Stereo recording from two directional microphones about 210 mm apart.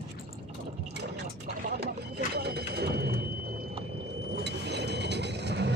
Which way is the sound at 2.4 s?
50° right (ahead or behind).